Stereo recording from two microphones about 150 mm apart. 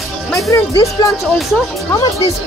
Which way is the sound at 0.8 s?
20° left (ahead or behind).